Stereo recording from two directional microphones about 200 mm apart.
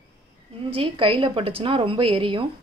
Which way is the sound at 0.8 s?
25° right (ahead or behind).